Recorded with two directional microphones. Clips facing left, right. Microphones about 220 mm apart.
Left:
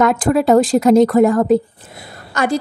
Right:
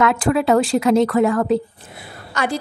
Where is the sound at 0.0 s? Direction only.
40° left (ahead or behind).